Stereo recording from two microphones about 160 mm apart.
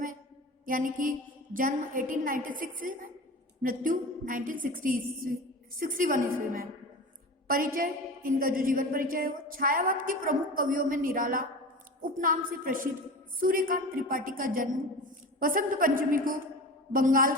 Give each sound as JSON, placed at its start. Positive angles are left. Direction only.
{"t": 0.6, "sound": "a woman's voice", "side_deg": -60}